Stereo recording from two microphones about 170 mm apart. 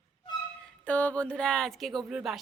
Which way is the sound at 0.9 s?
10° left (ahead or behind).